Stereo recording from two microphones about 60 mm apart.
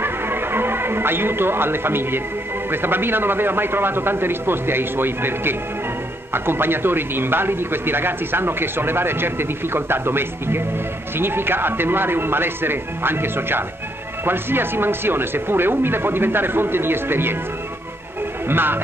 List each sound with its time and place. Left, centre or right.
0.0 s music: right
2.7 s a man's voice: right
18.5 s a man's voice: right